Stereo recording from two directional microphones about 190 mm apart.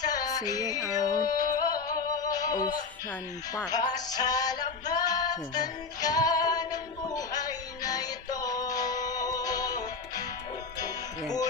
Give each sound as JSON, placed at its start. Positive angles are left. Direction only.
{"t": 0.0, "sound": "music", "side_deg": 20}
{"t": 3.5, "sound": "speech", "side_deg": 20}
{"t": 4.9, "sound": "music", "side_deg": 20}